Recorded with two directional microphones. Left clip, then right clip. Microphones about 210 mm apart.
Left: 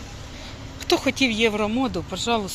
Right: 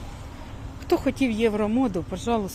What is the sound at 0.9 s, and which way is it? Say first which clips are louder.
Speech: left 3 dB; 10° right (ahead or behind).